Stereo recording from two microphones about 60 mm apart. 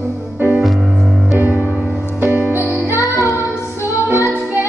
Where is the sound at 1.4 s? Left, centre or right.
Right.